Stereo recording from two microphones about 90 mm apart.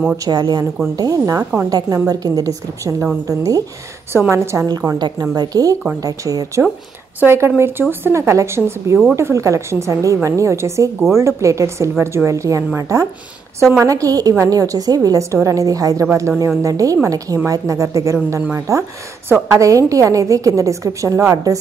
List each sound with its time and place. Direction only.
0.2 s a woman's voice: 50° right (ahead or behind)
5.2 s a woman's voice: 45° right (ahead or behind)
7.2 s a woman's voice: 25° right (ahead or behind)